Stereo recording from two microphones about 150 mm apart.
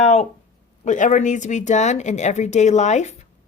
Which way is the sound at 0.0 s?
45° left (ahead or behind).